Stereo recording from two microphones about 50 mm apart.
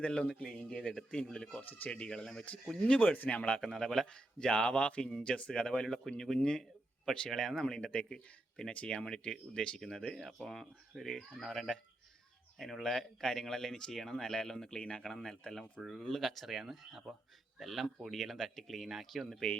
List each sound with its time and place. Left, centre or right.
0.0 s speech: centre
2.9 s speech: left
3.6 s speech: centre
4.0 s a man's voice: centre
9.0 s speech: centre